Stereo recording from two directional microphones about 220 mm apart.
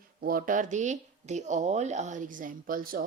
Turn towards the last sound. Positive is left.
turn(degrees=-40)  # may be behind; listen again after turning